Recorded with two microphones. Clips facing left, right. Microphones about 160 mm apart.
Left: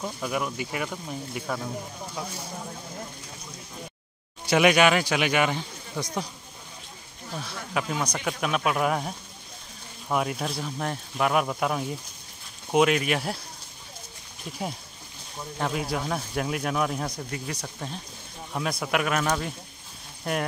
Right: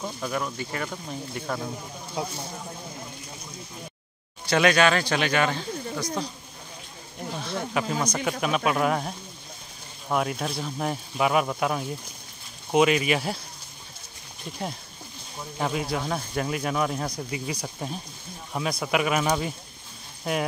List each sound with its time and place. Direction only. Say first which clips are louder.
0.0 s speech: even; 5° left (ahead or behind)
2.2 s speech: right 5 dB; 20° right (ahead or behind)
4.5 s speech: left 1 dB; 15° left (ahead or behind)
7.7 s speech: even; 5° right (ahead or behind)
15.5 s speech: right 1 dB; centre (ahead or behind)
17.6 s speech: right 3 dB; 10° right (ahead or behind)